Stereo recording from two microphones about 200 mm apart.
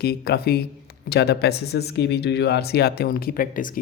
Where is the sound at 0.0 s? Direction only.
50° left (ahead or behind).